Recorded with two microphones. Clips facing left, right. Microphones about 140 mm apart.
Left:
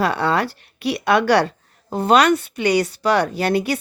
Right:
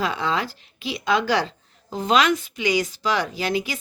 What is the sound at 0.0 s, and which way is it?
A woman's voice, 65° left (ahead or behind).